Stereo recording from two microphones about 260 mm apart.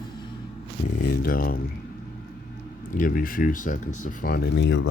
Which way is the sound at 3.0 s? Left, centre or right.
Left.